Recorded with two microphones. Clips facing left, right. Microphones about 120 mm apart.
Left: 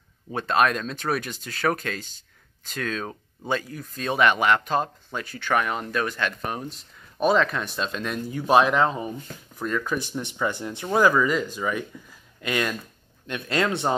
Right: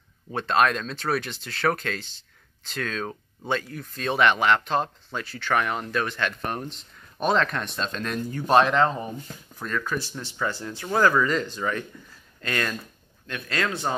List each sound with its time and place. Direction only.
0.3 s speech: 10° left (ahead or behind)
13.3 s speech: 25° left (ahead or behind)